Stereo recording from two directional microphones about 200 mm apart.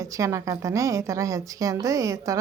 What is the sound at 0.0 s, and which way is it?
A woman's voice, 15° right (ahead or behind).